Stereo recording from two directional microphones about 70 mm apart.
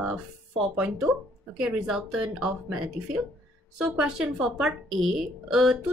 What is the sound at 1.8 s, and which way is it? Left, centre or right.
Speech, centre.